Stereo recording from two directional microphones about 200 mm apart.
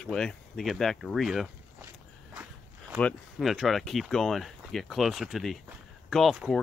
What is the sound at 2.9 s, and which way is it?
Speech, 5° left (ahead or behind).